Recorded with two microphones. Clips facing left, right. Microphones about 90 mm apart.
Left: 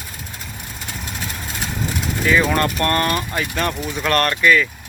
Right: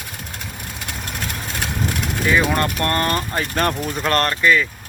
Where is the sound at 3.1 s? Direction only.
35° right (ahead or behind).